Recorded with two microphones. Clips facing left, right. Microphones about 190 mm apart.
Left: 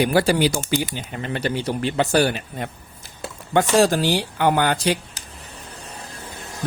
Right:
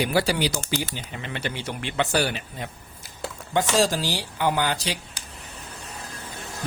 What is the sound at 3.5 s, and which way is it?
Speech, 60° left (ahead or behind).